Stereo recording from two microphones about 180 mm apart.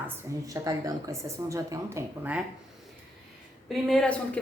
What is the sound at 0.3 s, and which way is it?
A woman's voice, 15° right (ahead or behind).